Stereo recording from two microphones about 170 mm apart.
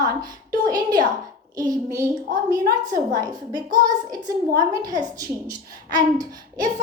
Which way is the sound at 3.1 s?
25° right (ahead or behind).